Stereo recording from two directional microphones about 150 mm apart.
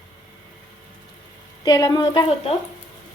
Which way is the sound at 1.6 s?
25° left (ahead or behind).